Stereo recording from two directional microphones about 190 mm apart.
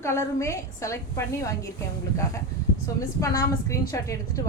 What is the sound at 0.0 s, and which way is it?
A woman's voice, 15° left (ahead or behind).